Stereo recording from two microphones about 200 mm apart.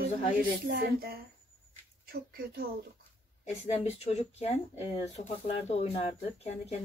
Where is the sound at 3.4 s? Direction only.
30° left (ahead or behind).